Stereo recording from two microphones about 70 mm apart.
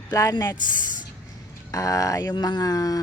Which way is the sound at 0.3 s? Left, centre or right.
Left.